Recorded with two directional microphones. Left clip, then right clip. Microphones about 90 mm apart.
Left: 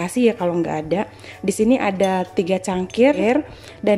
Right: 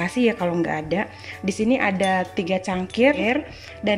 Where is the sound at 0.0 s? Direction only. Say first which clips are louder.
Left 3 dB; 35° left (ahead or behind).